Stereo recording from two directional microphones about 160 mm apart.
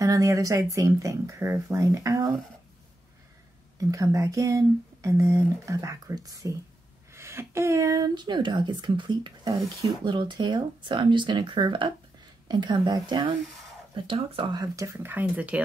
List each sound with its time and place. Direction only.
0.0 s speech: 20° right (ahead or behind)
3.9 s speech: 20° right (ahead or behind)
15.0 s speech: 10° right (ahead or behind)